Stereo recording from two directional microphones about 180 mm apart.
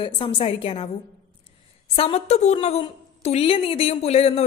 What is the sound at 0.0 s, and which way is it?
Speech, 30° left (ahead or behind).